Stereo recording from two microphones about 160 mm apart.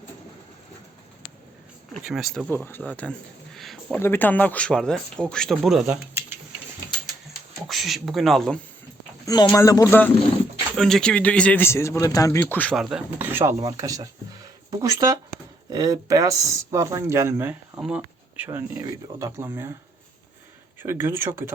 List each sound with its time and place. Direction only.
2.0 s speech: 5° right (ahead or behind)
2.5 s speech: 10° left (ahead or behind)
4.0 s speech: 15° left (ahead or behind); by 6.0 s 5° right (ahead or behind)
7.7 s speech: centre (ahead or behind)
9.2 s speech: 25° left (ahead or behind)
10.8 s speech: 5° left (ahead or behind); by 12.4 s 20° left (ahead or behind)
12.4 s speech: 10° left (ahead or behind)
12.7 s speech: 5° right (ahead or behind)
20.8 s speech: 15° right (ahead or behind)